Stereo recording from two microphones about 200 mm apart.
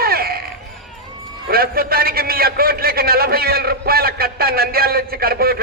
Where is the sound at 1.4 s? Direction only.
50° right (ahead or behind).